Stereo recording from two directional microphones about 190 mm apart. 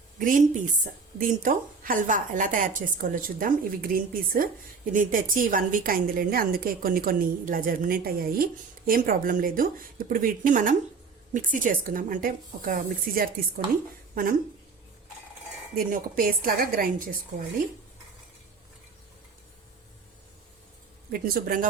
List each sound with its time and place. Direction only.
0.2 s a woman's voice: 45° right (ahead or behind)
15.7 s a woman's voice: 50° right (ahead or behind)
21.1 s a woman's voice: 50° right (ahead or behind)